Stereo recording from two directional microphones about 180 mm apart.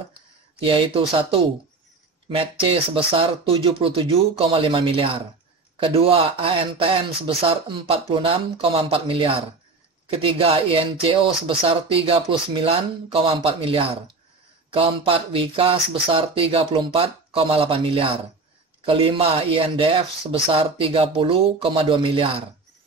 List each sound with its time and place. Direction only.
0.6 s speech: 30° right (ahead or behind)